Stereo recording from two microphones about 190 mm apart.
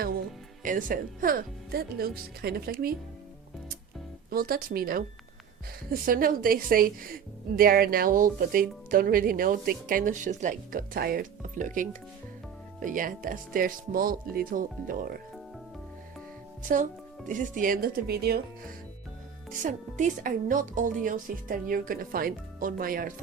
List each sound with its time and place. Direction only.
0.6 s a woman's voice: 45° right (ahead or behind)
4.3 s a woman's voice: 50° right (ahead or behind)
17.2 s a woman's voice: 45° right (ahead or behind)
19.5 s a woman's voice: 45° right (ahead or behind)